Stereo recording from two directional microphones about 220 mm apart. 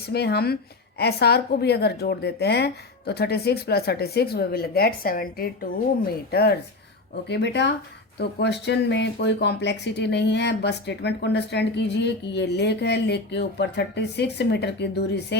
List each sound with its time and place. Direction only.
0.1 s speech: 45° left (ahead or behind)